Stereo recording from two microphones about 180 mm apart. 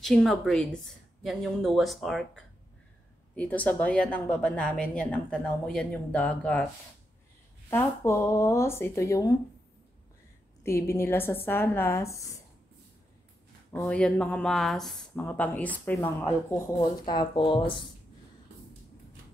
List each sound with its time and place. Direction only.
0.0 s a woman's voice: centre (ahead or behind)
7.7 s speech: 15° left (ahead or behind)
10.6 s speech: 15° left (ahead or behind)
13.8 s a woman's voice: 5° left (ahead or behind)
17.0 s speech: 25° left (ahead or behind)